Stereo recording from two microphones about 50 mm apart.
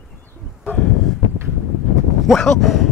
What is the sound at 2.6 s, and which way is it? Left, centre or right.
Speech, centre.